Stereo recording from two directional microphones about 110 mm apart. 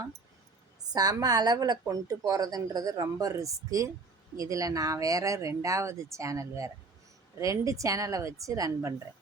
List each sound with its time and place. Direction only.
0.9 s a man's voice: 35° right (ahead or behind)